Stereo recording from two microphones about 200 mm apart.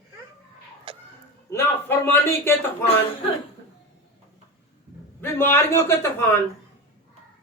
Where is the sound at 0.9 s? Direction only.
25° right (ahead or behind).